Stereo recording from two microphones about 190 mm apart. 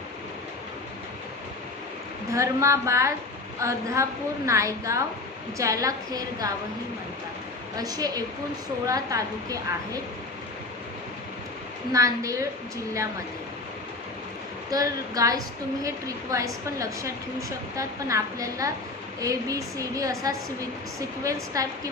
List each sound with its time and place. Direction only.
2.3 s a woman's voice: 15° right (ahead or behind)
7.8 s a woman's voice: 20° right (ahead or behind)
11.9 s a woman's voice: 15° right (ahead or behind)
14.7 s a woman's voice: 20° right (ahead or behind)